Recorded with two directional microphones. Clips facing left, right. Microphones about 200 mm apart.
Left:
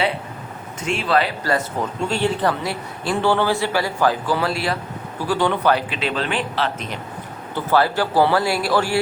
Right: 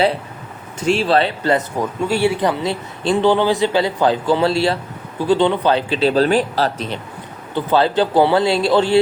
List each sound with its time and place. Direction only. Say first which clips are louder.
0.8 s a man's voice: right 5 dB; 30° right (ahead or behind)
1.8 s a man's voice: right 4 dB; 10° right (ahead or behind); by 7.0 s 30° right (ahead or behind)
7.5 s a man's voice: right 3 dB; 20° right (ahead or behind)